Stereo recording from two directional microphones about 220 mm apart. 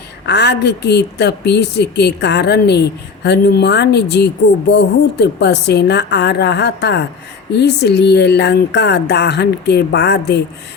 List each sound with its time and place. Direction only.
0.3 s speech: 50° left (ahead or behind)